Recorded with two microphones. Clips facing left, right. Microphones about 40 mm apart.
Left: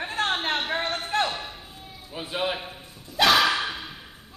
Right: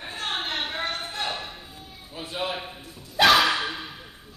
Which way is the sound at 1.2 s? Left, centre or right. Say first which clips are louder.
Even; centre.